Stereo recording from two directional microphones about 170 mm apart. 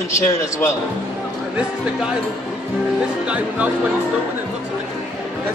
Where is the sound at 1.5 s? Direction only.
5° right (ahead or behind).